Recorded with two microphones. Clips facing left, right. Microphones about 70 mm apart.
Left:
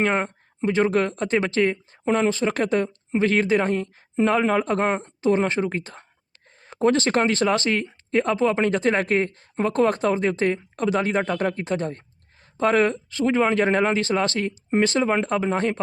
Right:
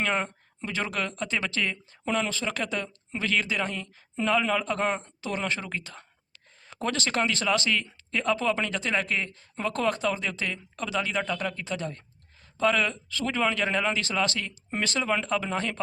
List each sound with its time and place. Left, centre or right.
0.0 s a woman's voice: left
9.6 s a woman's voice: left
13.1 s a woman's voice: left